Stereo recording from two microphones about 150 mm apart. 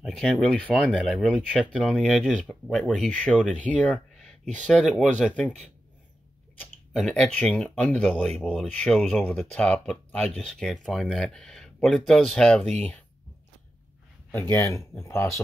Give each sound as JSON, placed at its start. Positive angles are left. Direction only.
{"t": 0.0, "sound": "speech", "side_deg": 0}
{"t": 14.5, "sound": "speech", "side_deg": 15}